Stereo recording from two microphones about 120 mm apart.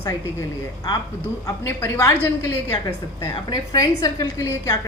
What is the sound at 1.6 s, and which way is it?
Speech, 20° left (ahead or behind).